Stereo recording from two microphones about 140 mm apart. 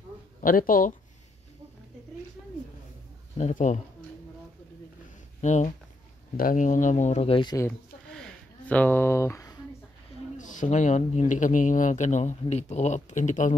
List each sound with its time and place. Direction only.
0.4 s speech: 90° left
3.3 s speech: 60° left (ahead or behind)
5.4 s speech: 55° left (ahead or behind)
6.3 s speech: 75° left (ahead or behind); by 7.5 s 40° left (ahead or behind)
8.1 s a sound: 5° left (ahead or behind); by 9.6 s 25° left (ahead or behind)
10.3 s speech: 65° left (ahead or behind)